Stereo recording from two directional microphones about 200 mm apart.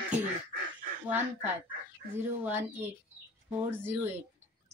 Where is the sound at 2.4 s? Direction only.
10° right (ahead or behind).